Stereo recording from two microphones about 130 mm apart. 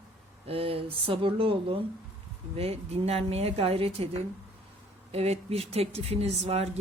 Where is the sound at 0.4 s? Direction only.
45° right (ahead or behind).